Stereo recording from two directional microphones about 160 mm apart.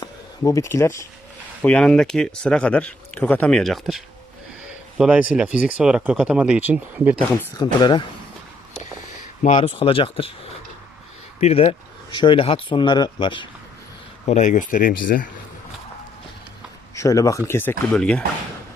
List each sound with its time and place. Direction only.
0.0 s speech: 20° left (ahead or behind)
1.6 s speech: 5° left (ahead or behind); by 7.2 s 10° right (ahead or behind)
7.5 s speech: 25° left (ahead or behind)
9.4 s speech: 40° left (ahead or behind)
11.3 s speech: 40° left (ahead or behind)
14.3 s speech: 50° left (ahead or behind)
16.9 s speech: 20° left (ahead or behind)